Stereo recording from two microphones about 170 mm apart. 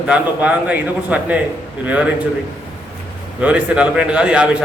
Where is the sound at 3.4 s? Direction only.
5° right (ahead or behind).